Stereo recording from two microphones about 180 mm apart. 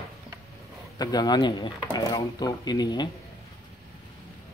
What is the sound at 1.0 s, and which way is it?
Speech, 20° left (ahead or behind).